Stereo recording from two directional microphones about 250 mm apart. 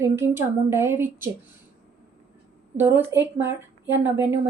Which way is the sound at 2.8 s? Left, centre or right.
Centre.